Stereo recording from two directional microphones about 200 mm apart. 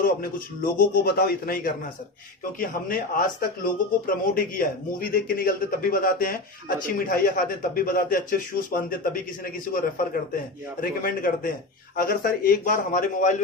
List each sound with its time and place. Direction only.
0.0 s speech: 45° left (ahead or behind)